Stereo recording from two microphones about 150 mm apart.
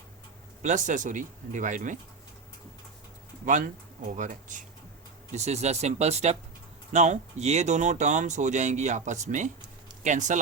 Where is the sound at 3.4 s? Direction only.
55° right (ahead or behind).